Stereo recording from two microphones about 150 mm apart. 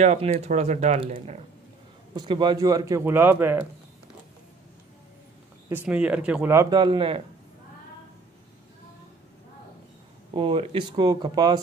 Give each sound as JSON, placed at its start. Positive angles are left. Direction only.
{"t": 0.0, "sound": "speech", "side_deg": -45}
{"t": 2.1, "sound": "a man's voice", "side_deg": -30}
{"t": 5.7, "sound": "speech", "side_deg": -10}
{"t": 6.5, "sound": "speech", "side_deg": -25}
{"t": 10.3, "sound": "speech", "side_deg": -35}